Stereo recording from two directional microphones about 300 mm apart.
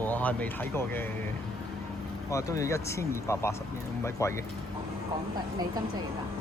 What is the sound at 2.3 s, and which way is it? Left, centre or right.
Speech, centre.